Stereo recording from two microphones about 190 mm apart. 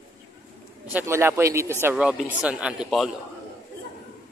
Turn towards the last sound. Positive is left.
turn(degrees=0)  # may be behind; listen again after turning